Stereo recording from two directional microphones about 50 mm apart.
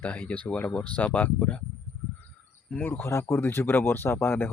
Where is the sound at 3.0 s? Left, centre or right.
Left.